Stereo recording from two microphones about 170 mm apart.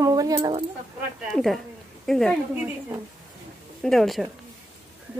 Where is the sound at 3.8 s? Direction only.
Centre (ahead or behind).